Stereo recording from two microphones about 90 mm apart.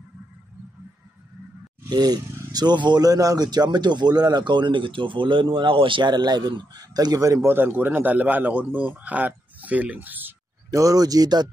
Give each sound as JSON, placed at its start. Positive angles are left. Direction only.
{"t": 1.9, "sound": "speech", "side_deg": -50}
{"t": 7.4, "sound": "a man's voice", "side_deg": -20}
{"t": 10.7, "sound": "speech", "side_deg": -40}